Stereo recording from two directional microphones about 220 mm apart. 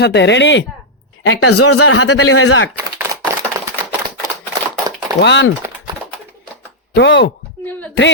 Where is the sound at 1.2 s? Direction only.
75° left (ahead or behind).